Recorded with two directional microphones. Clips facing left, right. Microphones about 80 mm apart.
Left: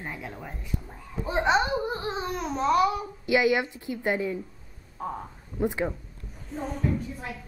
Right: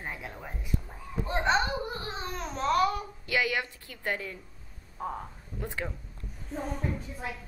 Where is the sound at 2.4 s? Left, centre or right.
Centre.